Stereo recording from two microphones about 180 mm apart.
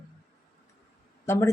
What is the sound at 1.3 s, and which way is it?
Speech, 15° left (ahead or behind).